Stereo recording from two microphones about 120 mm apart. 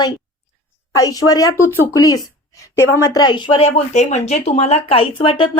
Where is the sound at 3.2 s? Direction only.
40° left (ahead or behind).